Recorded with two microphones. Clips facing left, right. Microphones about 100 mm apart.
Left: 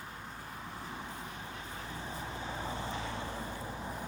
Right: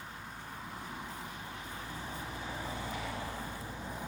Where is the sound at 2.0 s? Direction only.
35° left (ahead or behind).